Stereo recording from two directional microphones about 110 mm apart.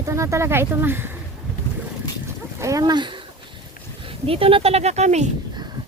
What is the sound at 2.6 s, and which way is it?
Speech, 30° right (ahead or behind).